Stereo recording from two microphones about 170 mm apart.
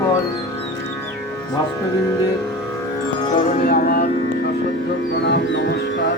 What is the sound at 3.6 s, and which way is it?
Music, 55° left (ahead or behind).